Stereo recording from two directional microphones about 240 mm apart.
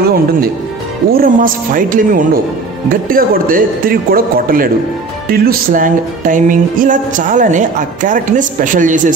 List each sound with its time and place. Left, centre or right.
1.1 s music: right